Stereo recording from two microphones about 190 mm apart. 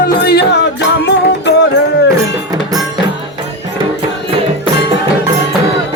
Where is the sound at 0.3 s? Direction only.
60° left (ahead or behind).